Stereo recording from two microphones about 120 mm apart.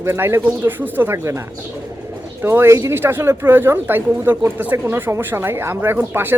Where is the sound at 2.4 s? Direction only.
20° right (ahead or behind).